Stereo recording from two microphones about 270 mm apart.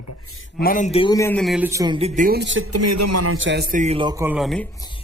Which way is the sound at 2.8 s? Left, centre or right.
Right.